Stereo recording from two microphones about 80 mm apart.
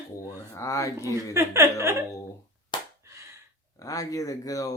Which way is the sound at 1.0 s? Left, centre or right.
Right.